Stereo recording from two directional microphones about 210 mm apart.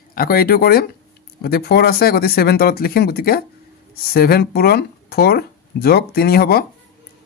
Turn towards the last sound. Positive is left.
turn(degrees=45)  # may be behind; listen again after turning